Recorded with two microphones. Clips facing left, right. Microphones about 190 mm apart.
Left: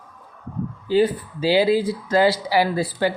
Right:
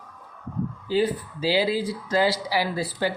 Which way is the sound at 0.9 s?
55° left (ahead or behind).